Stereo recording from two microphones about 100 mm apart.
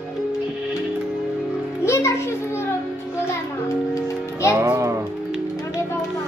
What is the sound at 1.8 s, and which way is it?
Music, 25° left (ahead or behind).